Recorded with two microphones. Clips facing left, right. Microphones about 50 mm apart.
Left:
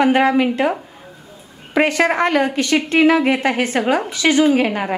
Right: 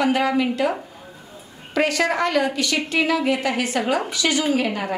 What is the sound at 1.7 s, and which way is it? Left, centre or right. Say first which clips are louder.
A woman's voice: left 4 dB; left.